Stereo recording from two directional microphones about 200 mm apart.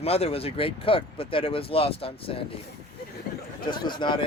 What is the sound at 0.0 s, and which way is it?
Speech, 30° left (ahead or behind).